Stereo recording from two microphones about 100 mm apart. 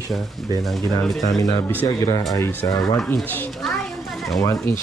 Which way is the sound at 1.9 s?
35° left (ahead or behind).